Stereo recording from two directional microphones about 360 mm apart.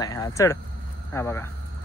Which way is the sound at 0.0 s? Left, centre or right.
Centre.